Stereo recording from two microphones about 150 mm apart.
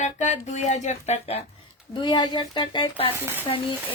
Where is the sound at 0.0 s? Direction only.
50° left (ahead or behind).